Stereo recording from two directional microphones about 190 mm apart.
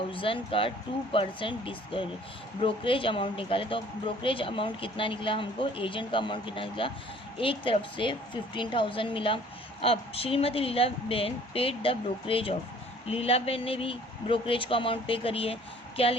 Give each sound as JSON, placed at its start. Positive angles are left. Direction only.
{"t": 0.1, "sound": "speech", "side_deg": 30}